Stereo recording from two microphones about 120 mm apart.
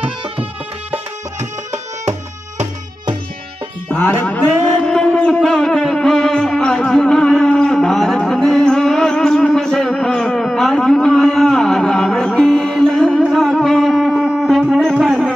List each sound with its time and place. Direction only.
1.4 s tabla: 25° right (ahead or behind)
3.9 s mantra: 15° left (ahead or behind); by 15.3 s centre (ahead or behind)